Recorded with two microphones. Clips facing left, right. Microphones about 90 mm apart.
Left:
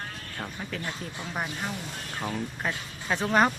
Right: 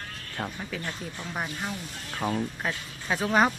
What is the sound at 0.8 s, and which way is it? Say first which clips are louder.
Speech: even; 15° left (ahead or behind).